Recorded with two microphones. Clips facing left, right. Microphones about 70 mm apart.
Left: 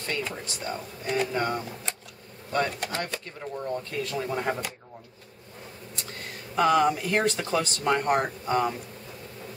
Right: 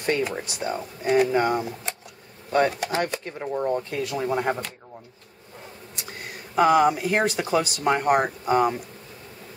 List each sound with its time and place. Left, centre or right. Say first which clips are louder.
0.0 s speech: right 7 dB; centre
3.3 s speech: right 7 dB; right
4.0 s speech: right 2 dB; centre
5.9 s speech: right 2 dB; centre